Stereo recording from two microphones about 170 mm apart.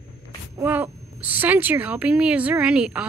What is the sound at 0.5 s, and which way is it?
Speech, 10° right (ahead or behind).